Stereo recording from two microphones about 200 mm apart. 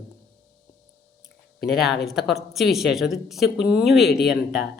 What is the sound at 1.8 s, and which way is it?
Speech, 55° left (ahead or behind).